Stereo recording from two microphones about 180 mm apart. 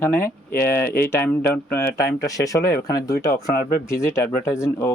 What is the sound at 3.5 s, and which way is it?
Speech, 55° left (ahead or behind).